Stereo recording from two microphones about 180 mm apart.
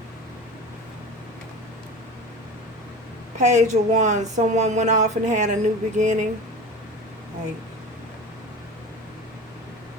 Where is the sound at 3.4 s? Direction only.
40° right (ahead or behind).